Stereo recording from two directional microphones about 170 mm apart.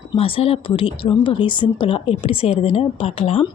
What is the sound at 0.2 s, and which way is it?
Speech, 35° left (ahead or behind).